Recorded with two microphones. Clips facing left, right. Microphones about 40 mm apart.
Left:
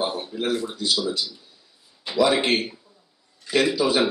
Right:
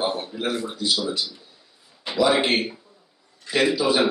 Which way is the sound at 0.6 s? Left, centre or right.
Centre.